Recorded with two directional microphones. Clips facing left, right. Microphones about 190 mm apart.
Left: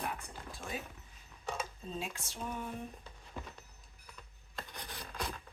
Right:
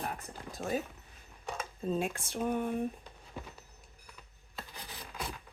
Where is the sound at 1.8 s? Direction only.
50° right (ahead or behind).